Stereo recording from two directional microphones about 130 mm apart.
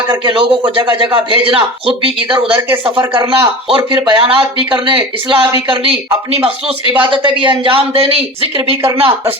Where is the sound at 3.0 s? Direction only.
35° right (ahead or behind).